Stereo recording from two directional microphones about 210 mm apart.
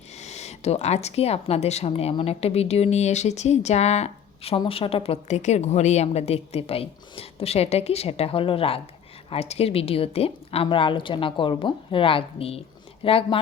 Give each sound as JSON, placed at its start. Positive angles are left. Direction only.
{"t": 0.2, "sound": "speech", "side_deg": 30}